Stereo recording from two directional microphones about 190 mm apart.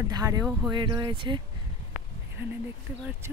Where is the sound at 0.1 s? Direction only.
20° right (ahead or behind).